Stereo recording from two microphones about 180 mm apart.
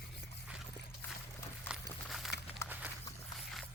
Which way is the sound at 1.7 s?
5° right (ahead or behind).